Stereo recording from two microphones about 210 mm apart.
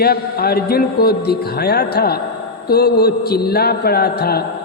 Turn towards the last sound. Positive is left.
turn(degrees=50)  # may be behind; listen again after turning